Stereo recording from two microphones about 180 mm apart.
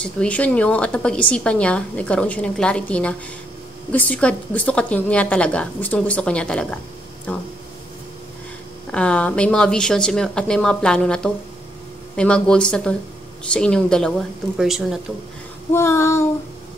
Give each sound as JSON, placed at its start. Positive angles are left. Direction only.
{"t": 0.0, "sound": "a woman's voice", "side_deg": 5}
{"t": 8.9, "sound": "speech", "side_deg": 5}
{"t": 15.7, "sound": "a woman's voice", "side_deg": 15}